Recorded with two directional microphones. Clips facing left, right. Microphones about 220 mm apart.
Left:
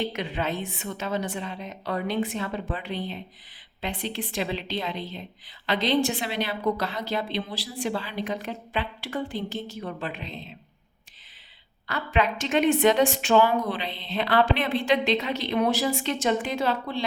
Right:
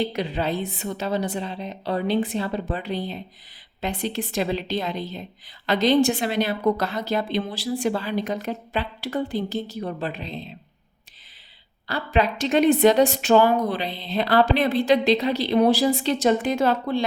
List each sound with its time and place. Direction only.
0.0 s a woman's voice: 35° right (ahead or behind)
11.9 s a woman's voice: 35° right (ahead or behind)